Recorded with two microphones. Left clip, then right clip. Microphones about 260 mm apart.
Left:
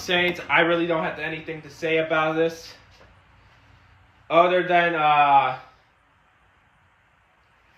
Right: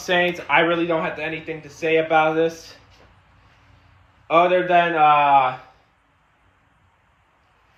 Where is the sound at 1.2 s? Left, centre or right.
Right.